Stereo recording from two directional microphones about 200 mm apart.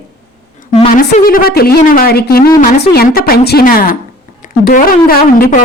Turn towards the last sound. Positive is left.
turn(degrees=45)  # may be behind; listen again after turning